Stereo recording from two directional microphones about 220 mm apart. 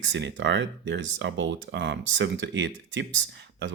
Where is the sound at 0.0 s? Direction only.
55° right (ahead or behind).